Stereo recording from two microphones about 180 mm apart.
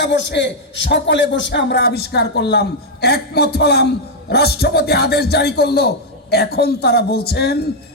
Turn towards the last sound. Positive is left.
turn(degrees=65)  # may be behind; listen again after turning